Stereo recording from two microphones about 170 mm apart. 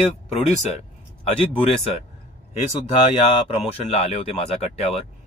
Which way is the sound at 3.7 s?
35° left (ahead or behind).